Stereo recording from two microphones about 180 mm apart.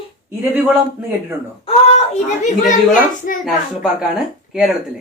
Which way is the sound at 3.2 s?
55° left (ahead or behind).